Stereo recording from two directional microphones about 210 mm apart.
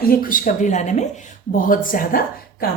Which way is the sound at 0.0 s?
45° left (ahead or behind).